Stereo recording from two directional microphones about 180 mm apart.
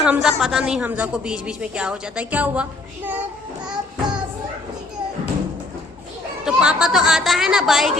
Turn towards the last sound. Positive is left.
turn(degrees=0)  # may be behind; listen again after turning